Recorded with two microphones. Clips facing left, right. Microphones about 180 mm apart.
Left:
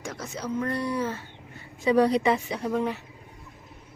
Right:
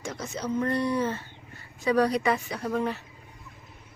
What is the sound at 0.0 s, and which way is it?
Speech, 5° left (ahead or behind).